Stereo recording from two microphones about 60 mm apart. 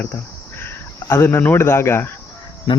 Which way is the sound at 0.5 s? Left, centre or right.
Left.